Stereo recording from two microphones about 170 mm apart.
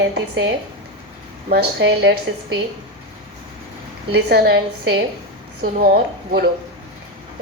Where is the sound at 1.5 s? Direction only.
75° right (ahead or behind).